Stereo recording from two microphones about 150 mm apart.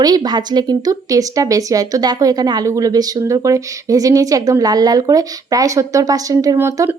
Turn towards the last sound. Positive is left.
turn(degrees=-15)  # may be behind; listen again after turning